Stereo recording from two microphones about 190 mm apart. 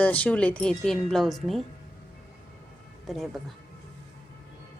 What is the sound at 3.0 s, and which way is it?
Speech, centre (ahead or behind).